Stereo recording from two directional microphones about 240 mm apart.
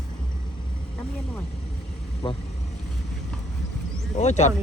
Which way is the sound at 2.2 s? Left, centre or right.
Left.